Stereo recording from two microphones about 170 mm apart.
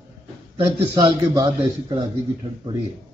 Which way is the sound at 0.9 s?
20° right (ahead or behind).